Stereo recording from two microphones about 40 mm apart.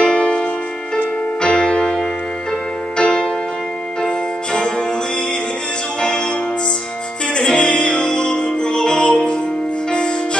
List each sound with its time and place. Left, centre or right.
0.0 s music: left
1.6 s music: centre
5.9 s music: left
7.5 s music: left